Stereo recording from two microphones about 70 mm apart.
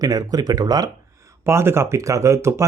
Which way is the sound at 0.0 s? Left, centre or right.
Right.